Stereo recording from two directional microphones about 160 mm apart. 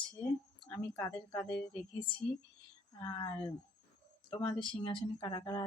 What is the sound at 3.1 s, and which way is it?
Speech, 30° left (ahead or behind).